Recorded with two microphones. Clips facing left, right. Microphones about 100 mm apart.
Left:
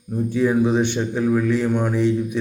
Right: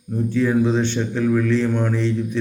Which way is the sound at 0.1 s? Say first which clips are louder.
Even; 15° left (ahead or behind).